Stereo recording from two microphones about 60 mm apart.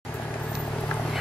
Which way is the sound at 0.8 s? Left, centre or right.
Left.